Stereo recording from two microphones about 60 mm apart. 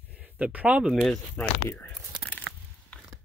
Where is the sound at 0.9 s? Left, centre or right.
Centre.